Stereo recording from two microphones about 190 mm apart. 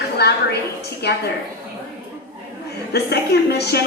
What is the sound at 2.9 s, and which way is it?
Speech, 60° left (ahead or behind).